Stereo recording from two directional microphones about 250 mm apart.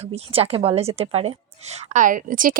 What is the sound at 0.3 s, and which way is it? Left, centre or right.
A woman's voice, right.